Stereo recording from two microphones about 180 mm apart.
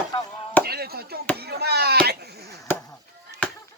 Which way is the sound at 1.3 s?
60° right (ahead or behind).